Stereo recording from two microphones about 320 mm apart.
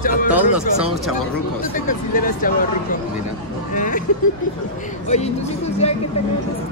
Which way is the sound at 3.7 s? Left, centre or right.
Left.